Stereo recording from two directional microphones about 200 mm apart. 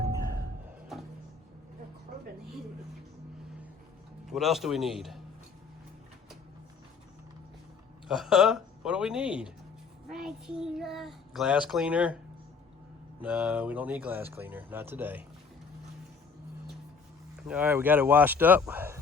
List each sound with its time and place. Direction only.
2.1 s a sound: 45° right (ahead or behind)
4.3 s a child's voice: centre (ahead or behind)
8.0 s a child's voice: centre (ahead or behind)
13.2 s speech: 5° right (ahead or behind)
17.3 s speech: 5° right (ahead or behind)